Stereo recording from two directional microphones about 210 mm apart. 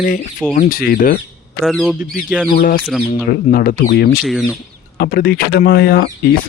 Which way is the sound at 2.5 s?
40° left (ahead or behind).